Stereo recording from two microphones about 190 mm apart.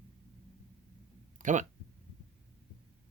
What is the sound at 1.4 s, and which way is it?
Speech, 40° right (ahead or behind).